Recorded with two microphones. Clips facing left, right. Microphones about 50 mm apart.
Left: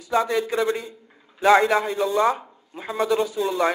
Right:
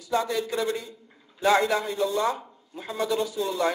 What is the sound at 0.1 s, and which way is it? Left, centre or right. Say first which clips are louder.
A man's voice: left 4 dB; left.